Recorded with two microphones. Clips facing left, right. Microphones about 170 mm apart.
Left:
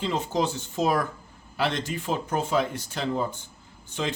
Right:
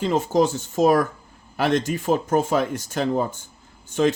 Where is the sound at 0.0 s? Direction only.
45° right (ahead or behind).